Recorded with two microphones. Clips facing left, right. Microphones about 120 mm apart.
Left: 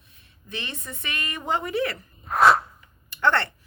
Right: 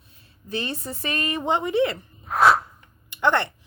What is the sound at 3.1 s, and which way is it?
Speech, 15° right (ahead or behind).